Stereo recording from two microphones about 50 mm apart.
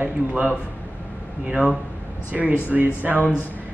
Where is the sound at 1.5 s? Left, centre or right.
Centre; by 3.2 s right.